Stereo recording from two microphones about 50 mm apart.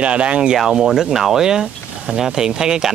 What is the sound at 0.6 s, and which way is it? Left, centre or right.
Speech, centre.